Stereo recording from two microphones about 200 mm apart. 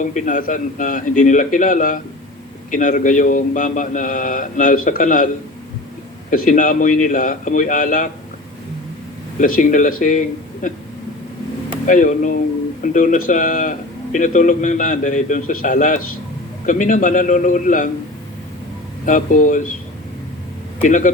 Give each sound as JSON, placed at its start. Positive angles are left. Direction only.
{"t": 0.0, "sound": "a man's voice", "side_deg": 40}
{"t": 6.3, "sound": "a man's voice", "side_deg": 40}
{"t": 9.4, "sound": "a man's voice", "side_deg": 40}
{"t": 11.9, "sound": "a man's voice", "side_deg": 40}
{"t": 19.0, "sound": "a man's voice", "side_deg": 40}
{"t": 20.8, "sound": "a man's voice", "side_deg": 40}